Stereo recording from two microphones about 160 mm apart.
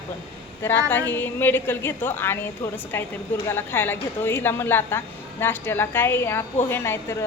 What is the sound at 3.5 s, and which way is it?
A woman's voice, 15° left (ahead or behind).